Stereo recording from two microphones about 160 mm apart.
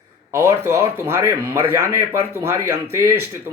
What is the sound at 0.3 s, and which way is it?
Speech, 15° right (ahead or behind).